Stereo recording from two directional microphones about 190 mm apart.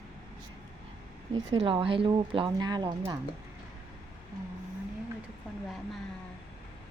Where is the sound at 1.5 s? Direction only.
30° right (ahead or behind).